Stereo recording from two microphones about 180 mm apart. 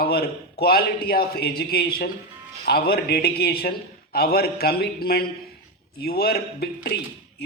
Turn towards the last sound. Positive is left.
turn(degrees=60)  # may be behind; listen again after turning